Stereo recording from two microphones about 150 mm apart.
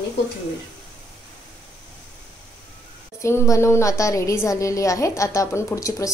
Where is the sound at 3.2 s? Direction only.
20° left (ahead or behind).